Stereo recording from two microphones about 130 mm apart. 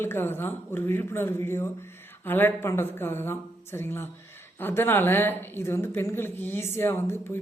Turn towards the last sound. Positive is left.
turn(degrees=20)  # may be behind; listen again after turning